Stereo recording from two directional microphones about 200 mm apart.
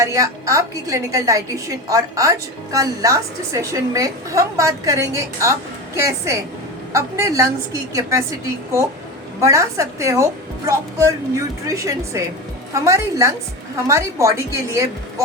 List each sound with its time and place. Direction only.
0.0 s a woman's voice: 15° right (ahead or behind)